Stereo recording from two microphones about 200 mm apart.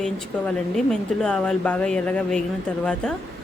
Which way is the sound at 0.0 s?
Centre (ahead or behind).